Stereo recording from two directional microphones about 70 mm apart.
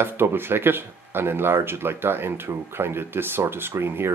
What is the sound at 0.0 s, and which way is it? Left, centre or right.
Speech, right.